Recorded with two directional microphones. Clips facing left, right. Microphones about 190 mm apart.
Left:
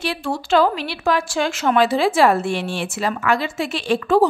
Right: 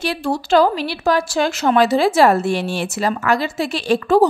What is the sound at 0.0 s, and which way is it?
A woman's voice, 40° right (ahead or behind).